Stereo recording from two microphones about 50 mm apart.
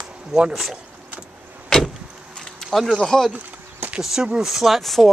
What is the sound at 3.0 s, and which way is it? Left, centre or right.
Speech, centre.